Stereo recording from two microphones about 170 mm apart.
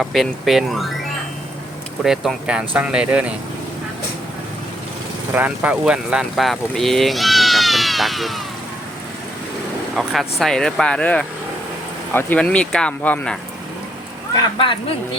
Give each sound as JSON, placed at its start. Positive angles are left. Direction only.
{"t": 0.0, "sound": "speech", "side_deg": 0}
{"t": 2.0, "sound": "speech", "side_deg": -5}
{"t": 5.3, "sound": "speech", "side_deg": -10}
{"t": 9.9, "sound": "speech", "side_deg": 0}
{"t": 14.6, "sound": "speech", "side_deg": 30}